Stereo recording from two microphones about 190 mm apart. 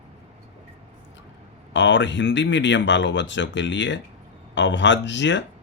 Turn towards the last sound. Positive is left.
turn(degrees=70)  # may be behind; listen again after turning